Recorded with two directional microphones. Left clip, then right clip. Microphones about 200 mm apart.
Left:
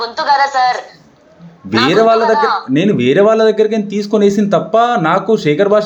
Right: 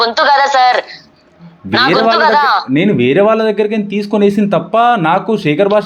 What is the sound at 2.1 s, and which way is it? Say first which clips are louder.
Speech: right 2 dB; 40° right (ahead or behind).